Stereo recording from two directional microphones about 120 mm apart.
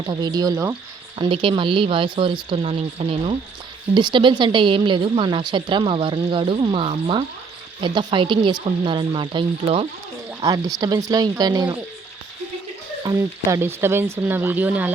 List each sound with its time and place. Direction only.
0.0 s speech: 35° right (ahead or behind)
1.2 s a woman's voice: 45° right (ahead or behind)
10.4 s speech: 30° right (ahead or behind)
13.1 s speech: 20° right (ahead or behind)